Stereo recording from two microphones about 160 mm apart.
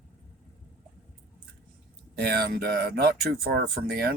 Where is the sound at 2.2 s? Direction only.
75° right (ahead or behind).